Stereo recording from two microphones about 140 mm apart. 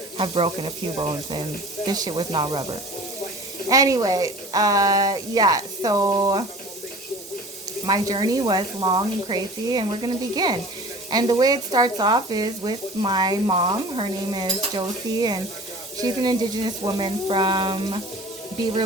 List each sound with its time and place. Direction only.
0.2 s speech: 40° right (ahead or behind)
3.7 s speech: 25° right (ahead or behind)
7.9 s speech: 30° right (ahead or behind)